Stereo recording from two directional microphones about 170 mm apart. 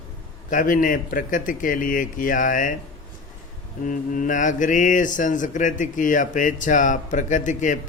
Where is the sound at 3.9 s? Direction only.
50° left (ahead or behind).